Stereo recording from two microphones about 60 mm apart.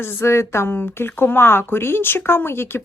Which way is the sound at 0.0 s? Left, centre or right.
Left.